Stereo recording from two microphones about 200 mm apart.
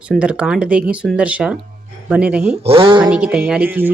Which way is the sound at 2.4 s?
30° right (ahead or behind).